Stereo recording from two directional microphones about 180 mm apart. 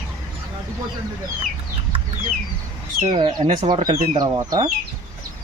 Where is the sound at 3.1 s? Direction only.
25° right (ahead or behind).